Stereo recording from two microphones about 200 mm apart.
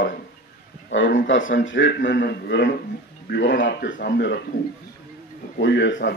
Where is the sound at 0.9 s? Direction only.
70° left (ahead or behind).